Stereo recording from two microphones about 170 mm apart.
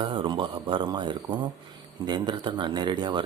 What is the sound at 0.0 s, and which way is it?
A man's voice, 30° right (ahead or behind).